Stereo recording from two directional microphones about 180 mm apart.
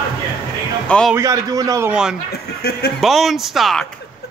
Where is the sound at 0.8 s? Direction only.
5° left (ahead or behind).